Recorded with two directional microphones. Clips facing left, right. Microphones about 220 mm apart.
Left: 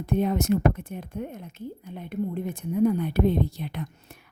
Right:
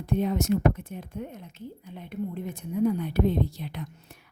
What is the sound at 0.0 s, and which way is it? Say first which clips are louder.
A woman's voice: left 2 dB; 55° left (ahead or behind).